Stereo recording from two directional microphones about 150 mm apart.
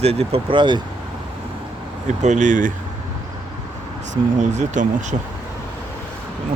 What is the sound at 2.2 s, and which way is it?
Speech, 50° right (ahead or behind).